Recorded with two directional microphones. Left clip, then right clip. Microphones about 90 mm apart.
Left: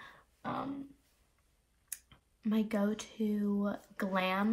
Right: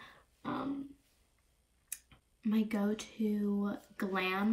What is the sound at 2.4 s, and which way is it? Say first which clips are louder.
Speech: left 1 dB; 35° left (ahead or behind).